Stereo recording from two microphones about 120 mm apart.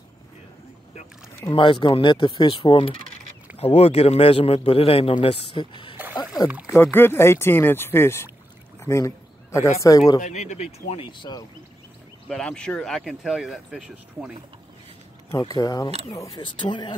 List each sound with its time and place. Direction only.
1.5 s a man's voice: 45° left (ahead or behind)
3.5 s a man's voice: 60° left (ahead or behind)
6.0 s a sound: 15° right (ahead or behind)
6.7 s speech: 15° left (ahead or behind)
10.2 s speech: 80° left; by 11.1 s 60° left (ahead or behind)
11.1 s speech: 35° left (ahead or behind)
12.3 s speech: 10° left (ahead or behind)
15.3 s speech: 30° left (ahead or behind)